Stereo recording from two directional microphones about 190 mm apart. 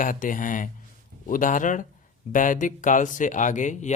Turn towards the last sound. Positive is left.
turn(degrees=40)  # may be behind; listen again after turning